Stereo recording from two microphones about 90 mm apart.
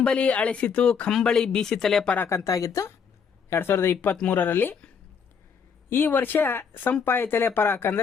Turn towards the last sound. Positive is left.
turn(degrees=25)  # may be behind; listen again after turning